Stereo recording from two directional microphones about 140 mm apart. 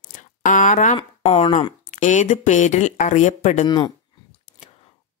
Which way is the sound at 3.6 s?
30° left (ahead or behind).